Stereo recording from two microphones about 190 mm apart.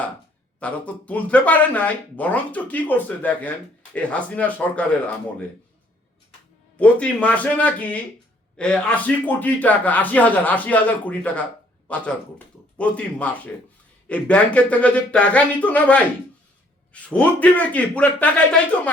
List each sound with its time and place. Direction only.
0.6 s a man's voice: 5° left (ahead or behind)
6.7 s a man's voice: 5° left (ahead or behind)